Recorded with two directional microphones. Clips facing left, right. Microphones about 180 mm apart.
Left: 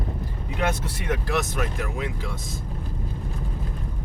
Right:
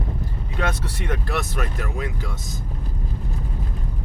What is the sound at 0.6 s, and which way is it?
Speech, 10° left (ahead or behind).